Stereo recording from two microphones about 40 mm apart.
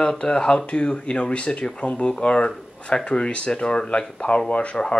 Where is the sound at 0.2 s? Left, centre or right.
Left.